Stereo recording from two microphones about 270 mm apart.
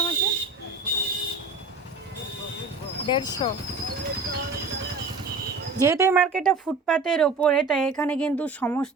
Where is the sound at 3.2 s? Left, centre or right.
Centre.